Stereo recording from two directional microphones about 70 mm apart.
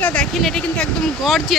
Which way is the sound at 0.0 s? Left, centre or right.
Centre.